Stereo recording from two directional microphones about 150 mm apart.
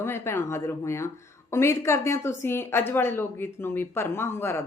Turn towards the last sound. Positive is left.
turn(degrees=15)  # may be behind; listen again after turning